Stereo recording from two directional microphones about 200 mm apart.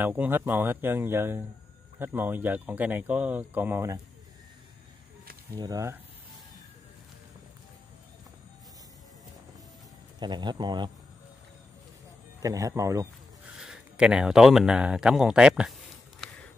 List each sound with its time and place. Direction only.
0.0 s speech: 10° right (ahead or behind)
5.6 s speech: 15° right (ahead or behind)
10.1 s speech: 20° right (ahead or behind)
12.4 s speech: 15° right (ahead or behind)
13.6 s speech: 5° right (ahead or behind)
16.2 s a sound: centre (ahead or behind)